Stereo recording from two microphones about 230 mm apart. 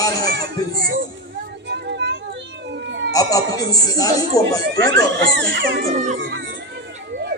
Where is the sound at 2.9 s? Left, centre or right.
Right.